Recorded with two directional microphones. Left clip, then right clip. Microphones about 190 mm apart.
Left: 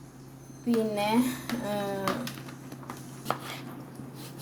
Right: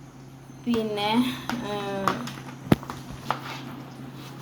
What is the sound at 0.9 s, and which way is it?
Speech, 35° left (ahead or behind).